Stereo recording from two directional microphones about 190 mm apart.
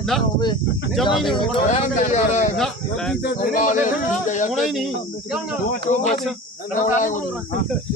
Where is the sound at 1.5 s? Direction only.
40° left (ahead or behind).